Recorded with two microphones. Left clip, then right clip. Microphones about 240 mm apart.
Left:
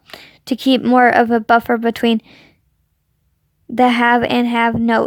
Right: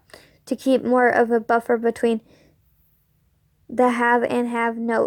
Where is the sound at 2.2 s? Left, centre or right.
Left.